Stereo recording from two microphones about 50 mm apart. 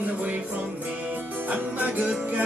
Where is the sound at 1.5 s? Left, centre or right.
Right.